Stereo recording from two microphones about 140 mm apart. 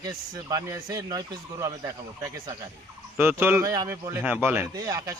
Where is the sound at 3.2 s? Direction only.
15° right (ahead or behind).